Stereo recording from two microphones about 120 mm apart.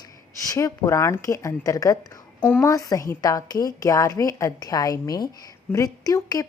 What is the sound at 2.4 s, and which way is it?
Speech, 15° left (ahead or behind).